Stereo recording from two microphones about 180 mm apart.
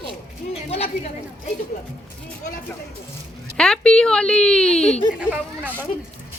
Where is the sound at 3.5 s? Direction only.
5° left (ahead or behind).